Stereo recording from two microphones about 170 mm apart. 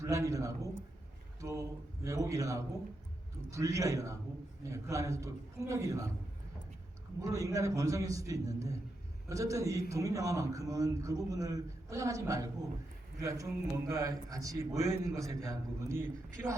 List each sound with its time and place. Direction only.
0.0 s a man's voice: 20° right (ahead or behind)
7.2 s a man's voice: 20° right (ahead or behind)